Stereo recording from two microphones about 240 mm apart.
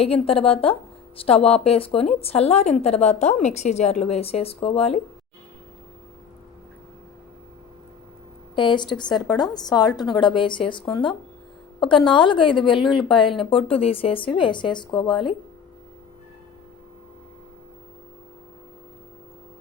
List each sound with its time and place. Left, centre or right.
0.0 s a woman's voice: left
8.5 s a woman's voice: centre